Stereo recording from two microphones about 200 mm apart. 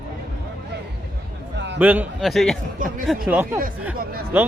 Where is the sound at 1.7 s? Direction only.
10° right (ahead or behind).